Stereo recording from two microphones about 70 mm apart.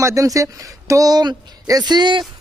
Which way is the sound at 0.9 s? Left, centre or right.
Right.